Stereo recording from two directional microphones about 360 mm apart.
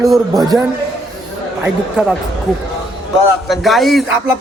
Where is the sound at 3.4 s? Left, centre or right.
Centre.